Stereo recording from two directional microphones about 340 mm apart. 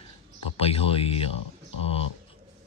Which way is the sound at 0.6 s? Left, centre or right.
Centre.